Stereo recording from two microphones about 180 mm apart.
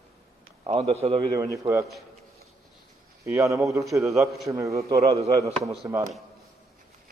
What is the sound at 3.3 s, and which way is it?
Speech, 15° right (ahead or behind).